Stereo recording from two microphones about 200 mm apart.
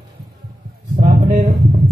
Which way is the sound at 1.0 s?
40° right (ahead or behind).